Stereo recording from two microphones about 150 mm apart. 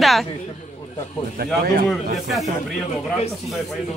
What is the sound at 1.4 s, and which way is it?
Speech, 90° right.